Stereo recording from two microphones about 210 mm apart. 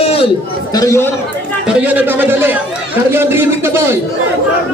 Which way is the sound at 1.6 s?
5° right (ahead or behind).